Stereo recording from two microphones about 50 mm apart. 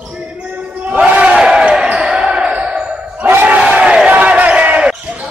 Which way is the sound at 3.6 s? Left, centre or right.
Centre.